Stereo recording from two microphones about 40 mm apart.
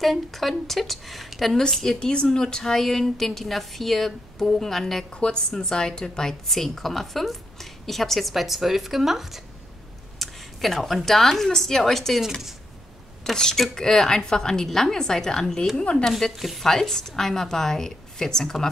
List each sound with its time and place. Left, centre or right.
0.0 s a woman's voice: centre
1.6 s a woman's voice: centre
5.1 s a woman's voice: left; by 12.2 s centre
12.2 s speech: centre
13.2 s a woman's voice: centre
16.1 s a woman's voice: centre
16.6 s a woman's voice: centre